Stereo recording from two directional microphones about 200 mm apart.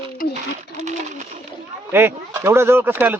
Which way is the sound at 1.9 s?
10° right (ahead or behind).